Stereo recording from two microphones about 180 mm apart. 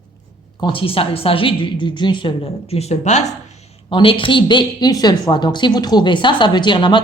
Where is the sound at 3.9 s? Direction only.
30° left (ahead or behind).